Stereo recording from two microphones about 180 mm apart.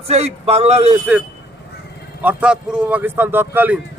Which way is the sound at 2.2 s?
10° right (ahead or behind).